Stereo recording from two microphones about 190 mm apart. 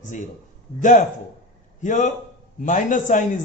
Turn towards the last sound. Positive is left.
turn(degrees=40)  # may be behind; listen again after turning